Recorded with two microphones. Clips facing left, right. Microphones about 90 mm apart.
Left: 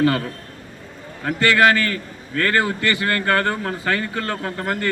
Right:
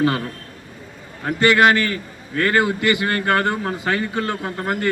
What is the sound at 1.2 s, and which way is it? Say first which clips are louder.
A man's voice: right 1 dB; 15° right (ahead or behind).